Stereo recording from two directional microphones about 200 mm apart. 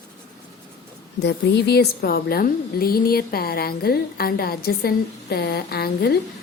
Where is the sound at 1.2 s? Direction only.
55° left (ahead or behind).